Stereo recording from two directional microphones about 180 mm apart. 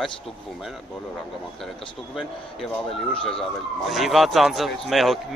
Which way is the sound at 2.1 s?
Centre (ahead or behind).